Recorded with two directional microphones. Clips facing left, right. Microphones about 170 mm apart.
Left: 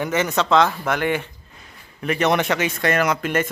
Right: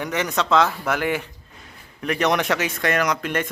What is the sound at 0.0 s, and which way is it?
A man's voice, centre (ahead or behind).